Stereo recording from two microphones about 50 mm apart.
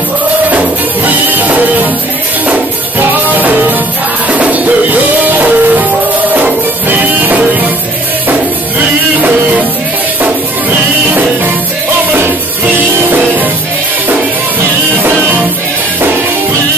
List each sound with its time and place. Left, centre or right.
1.0 s music: right
3.0 s music: right
4.3 s music: right